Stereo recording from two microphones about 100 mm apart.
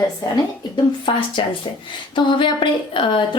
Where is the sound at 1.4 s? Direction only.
60° left (ahead or behind).